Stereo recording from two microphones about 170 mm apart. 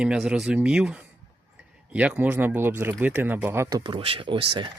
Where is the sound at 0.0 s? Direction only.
5° right (ahead or behind).